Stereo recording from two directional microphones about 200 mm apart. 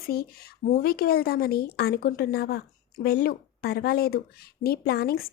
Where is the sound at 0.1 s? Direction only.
50° left (ahead or behind).